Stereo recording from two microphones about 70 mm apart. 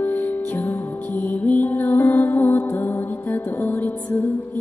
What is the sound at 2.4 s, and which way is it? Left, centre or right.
Music, left.